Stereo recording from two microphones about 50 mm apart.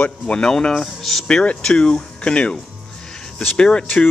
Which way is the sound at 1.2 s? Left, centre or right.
Left.